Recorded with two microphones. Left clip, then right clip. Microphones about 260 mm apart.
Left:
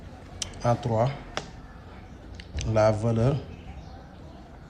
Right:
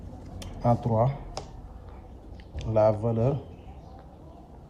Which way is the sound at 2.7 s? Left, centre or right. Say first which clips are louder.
Even; left.